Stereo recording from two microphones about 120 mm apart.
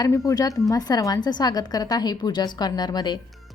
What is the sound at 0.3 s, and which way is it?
A woman's voice, 30° left (ahead or behind).